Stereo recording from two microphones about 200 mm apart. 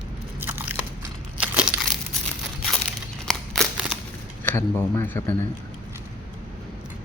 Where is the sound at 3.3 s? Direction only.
Centre (ahead or behind).